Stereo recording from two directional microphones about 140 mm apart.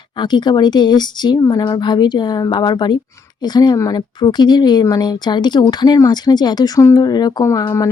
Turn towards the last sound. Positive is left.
turn(degrees=25)  # may be behind; listen again after turning